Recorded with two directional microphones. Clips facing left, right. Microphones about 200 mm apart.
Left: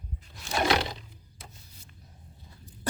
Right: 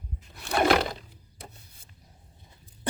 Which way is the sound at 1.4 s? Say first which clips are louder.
Right 5 dB; 60° right (ahead or behind).